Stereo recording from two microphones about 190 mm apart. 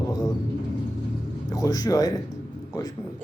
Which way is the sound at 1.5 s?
20° left (ahead or behind).